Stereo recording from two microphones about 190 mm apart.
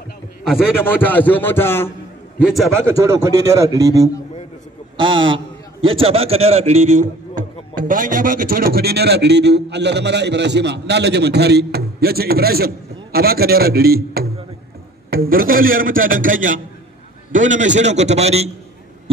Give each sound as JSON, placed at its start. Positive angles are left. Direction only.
{"t": 0.4, "sound": "a man's voice", "side_deg": 0}
{"t": 0.7, "sound": "a man's voice", "side_deg": 10}
{"t": 2.4, "sound": "a man's voice", "side_deg": 0}
{"t": 3.0, "sound": "a man's voice", "side_deg": -15}